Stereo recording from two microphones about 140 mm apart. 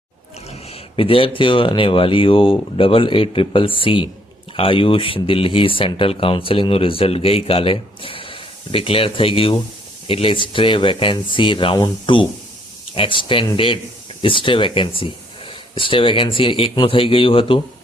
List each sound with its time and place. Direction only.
0.5 s speech: 45° left (ahead or behind)